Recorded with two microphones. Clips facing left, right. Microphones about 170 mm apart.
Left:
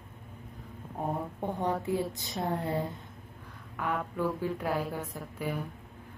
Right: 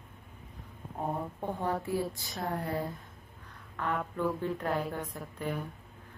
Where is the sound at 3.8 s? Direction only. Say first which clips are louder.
Left 1 dB; 5° left (ahead or behind).